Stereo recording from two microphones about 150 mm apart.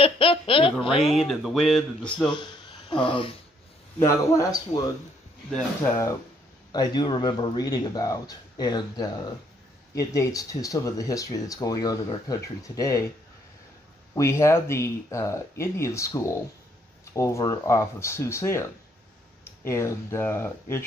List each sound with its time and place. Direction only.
0.0 s speech: 35° left (ahead or behind)
1.1 s speech: centre (ahead or behind)
2.2 s speech: 30° left (ahead or behind)
4.0 s speech: 20° left (ahead or behind)
6.7 s speech: 25° left (ahead or behind)
14.1 s speech: 20° left (ahead or behind)